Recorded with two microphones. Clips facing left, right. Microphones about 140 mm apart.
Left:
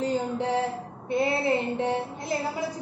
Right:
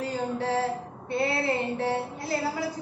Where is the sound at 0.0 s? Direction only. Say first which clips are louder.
Left 2 dB; 20° left (ahead or behind).